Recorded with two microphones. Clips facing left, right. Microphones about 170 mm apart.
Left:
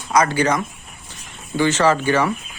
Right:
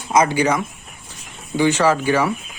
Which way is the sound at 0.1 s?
20° right (ahead or behind).